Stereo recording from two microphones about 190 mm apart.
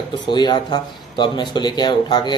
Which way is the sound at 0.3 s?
25° left (ahead or behind).